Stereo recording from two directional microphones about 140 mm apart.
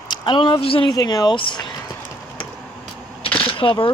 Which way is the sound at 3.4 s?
40° left (ahead or behind).